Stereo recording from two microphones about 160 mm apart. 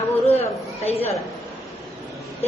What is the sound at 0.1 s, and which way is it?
Chatter, 40° left (ahead or behind).